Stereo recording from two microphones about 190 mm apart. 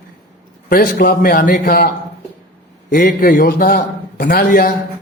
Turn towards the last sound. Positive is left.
turn(degrees=50)  # may be behind; listen again after turning